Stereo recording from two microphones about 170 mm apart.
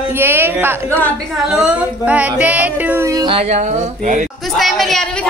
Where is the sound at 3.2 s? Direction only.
35° right (ahead or behind).